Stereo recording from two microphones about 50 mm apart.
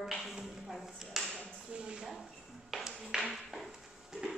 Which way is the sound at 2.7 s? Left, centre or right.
Centre.